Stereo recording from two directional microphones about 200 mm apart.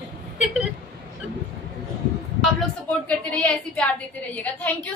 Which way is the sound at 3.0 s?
5° left (ahead or behind).